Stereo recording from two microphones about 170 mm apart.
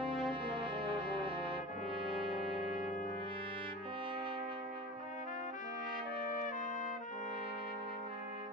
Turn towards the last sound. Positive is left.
turn(degrees=50)  # may be behind; listen again after turning